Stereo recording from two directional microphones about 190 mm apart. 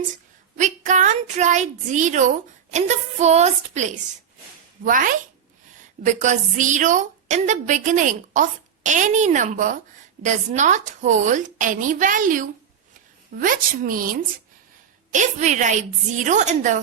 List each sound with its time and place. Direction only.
0.5 s a woman's voice: 40° right (ahead or behind)